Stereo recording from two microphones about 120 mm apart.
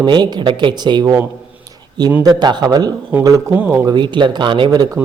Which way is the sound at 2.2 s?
35° right (ahead or behind).